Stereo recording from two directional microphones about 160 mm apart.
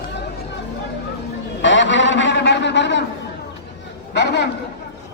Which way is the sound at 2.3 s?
90° left.